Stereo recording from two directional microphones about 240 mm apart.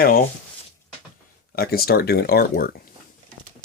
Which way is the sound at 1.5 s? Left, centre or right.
Left.